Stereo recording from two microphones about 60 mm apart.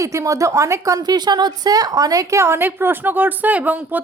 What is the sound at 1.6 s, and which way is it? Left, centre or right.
Speech, right.